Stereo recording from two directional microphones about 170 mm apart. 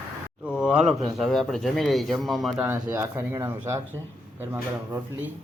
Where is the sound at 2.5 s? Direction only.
15° right (ahead or behind).